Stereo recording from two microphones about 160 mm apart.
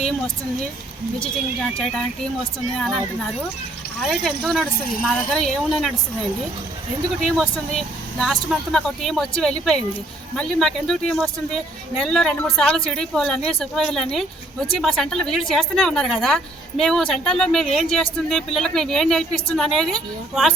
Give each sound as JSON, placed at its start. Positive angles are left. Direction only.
{"t": 2.7, "sound": "speech", "side_deg": 0}
{"t": 4.2, "sound": "speech", "side_deg": 0}
{"t": 7.2, "sound": "speech", "side_deg": 0}